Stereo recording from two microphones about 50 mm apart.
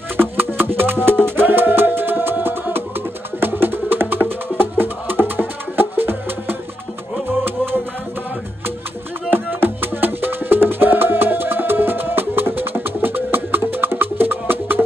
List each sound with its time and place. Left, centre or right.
0.4 s music: right
9.3 s music: right